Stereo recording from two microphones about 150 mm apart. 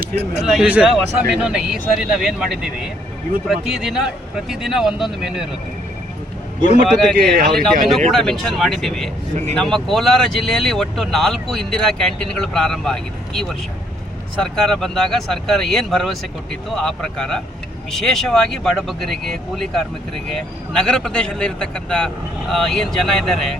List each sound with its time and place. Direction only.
0.0 s speech: 90° right
0.4 s speech: centre (ahead or behind)
6.8 s speech: centre (ahead or behind)